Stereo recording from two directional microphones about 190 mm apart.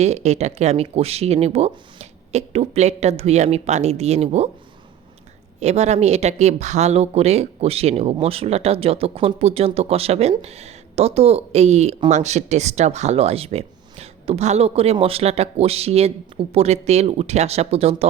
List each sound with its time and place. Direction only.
0.0 s speech: 35° right (ahead or behind)
5.5 s speech: 35° right (ahead or behind)